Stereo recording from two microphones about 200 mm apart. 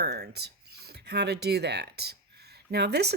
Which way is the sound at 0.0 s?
55° right (ahead or behind).